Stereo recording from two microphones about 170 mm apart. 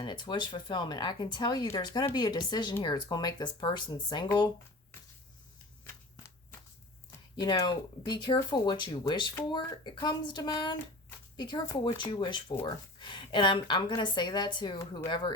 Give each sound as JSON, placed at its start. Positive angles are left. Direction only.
{"t": 0.0, "sound": "a woman's voice", "side_deg": 25}
{"t": 7.1, "sound": "a woman's voice", "side_deg": 20}